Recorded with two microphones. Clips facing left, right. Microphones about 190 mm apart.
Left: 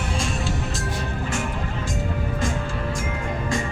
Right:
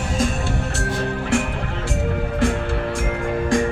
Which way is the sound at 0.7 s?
70° right (ahead or behind).